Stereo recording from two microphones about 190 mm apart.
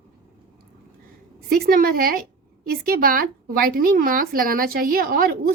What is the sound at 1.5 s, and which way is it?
A woman's voice, 50° right (ahead or behind).